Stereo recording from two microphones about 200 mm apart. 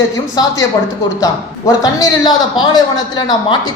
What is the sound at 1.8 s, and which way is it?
Speech, 20° left (ahead or behind).